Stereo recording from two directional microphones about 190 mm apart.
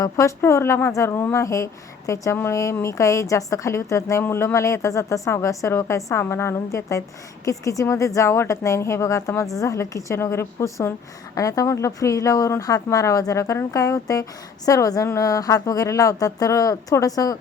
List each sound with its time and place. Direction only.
0.0 s speech: 15° left (ahead or behind)